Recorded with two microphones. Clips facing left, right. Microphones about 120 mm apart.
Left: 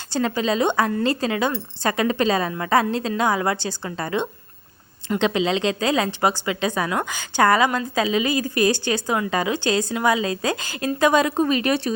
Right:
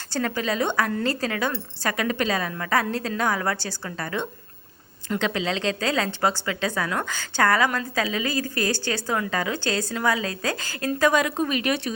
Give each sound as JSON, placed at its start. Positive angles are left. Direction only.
{"t": 0.1, "sound": "a woman's voice", "side_deg": 20}